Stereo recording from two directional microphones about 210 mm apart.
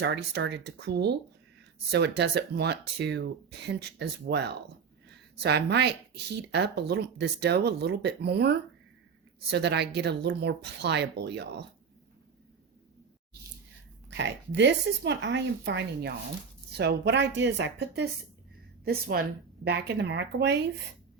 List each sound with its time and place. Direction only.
0.0 s speech: 55° right (ahead or behind)
14.1 s a woman's voice: 60° right (ahead or behind)